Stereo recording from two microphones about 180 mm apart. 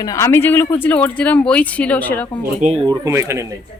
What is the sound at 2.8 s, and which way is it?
Speech, 20° right (ahead or behind).